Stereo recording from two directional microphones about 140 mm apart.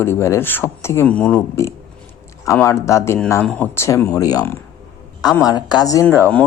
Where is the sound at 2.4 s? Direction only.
20° left (ahead or behind).